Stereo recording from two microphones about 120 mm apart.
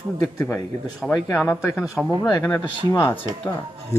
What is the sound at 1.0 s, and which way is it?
A man's voice, centre (ahead or behind).